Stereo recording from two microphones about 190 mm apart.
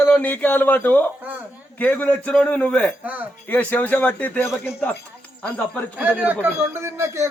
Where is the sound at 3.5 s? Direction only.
10° left (ahead or behind).